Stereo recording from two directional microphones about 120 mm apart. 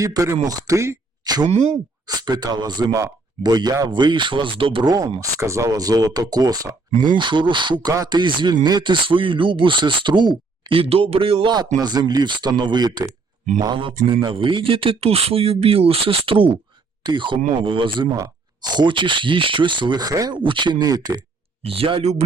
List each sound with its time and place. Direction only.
0.0 s speech: 25° right (ahead or behind)
1.5 s speech: 65° right (ahead or behind)
2.0 s speech: 35° right (ahead or behind)
7.0 s speech: 40° right (ahead or behind)
11.8 s speech: 35° right (ahead or behind)
18.1 s speech: 35° right (ahead or behind)
21.6 s speech: 50° right (ahead or behind)